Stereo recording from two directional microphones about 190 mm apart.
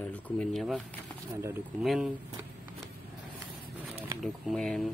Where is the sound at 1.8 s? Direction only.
Centre (ahead or behind).